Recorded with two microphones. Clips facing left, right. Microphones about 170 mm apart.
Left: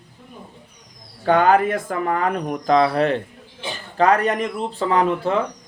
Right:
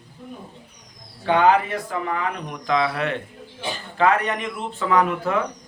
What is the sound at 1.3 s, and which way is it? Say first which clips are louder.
Speech: left 2 dB; 45° left (ahead or behind).